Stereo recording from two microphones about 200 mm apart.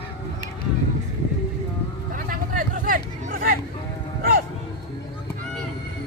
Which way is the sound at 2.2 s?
40° right (ahead or behind).